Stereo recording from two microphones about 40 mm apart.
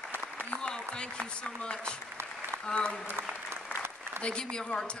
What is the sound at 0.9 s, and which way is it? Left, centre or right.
A woman's voice, left.